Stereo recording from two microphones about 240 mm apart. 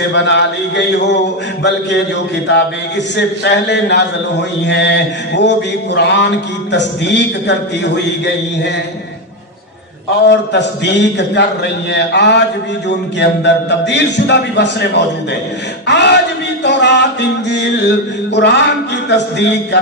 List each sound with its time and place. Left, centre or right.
0.1 s a man's voice: left
3.2 s a man's voice: left
10.2 s a man's voice: left